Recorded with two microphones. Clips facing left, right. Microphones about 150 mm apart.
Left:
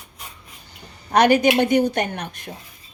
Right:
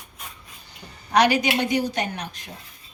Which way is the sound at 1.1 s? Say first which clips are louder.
Left 4 dB; 50° left (ahead or behind).